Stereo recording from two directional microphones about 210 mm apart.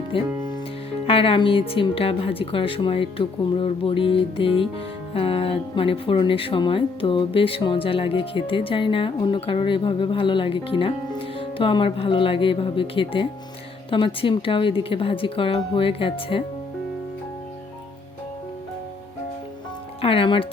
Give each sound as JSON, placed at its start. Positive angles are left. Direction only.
{"t": 0.1, "sound": "speech", "side_deg": 25}
{"t": 20.0, "sound": "speech", "side_deg": 25}